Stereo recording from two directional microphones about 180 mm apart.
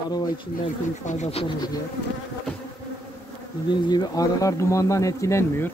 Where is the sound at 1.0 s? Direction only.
40° left (ahead or behind).